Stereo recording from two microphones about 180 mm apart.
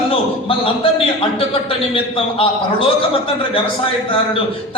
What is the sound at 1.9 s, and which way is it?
Speech, 30° left (ahead or behind).